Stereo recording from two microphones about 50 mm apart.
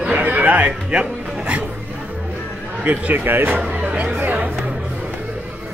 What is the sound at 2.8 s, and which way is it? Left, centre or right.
Speech, right.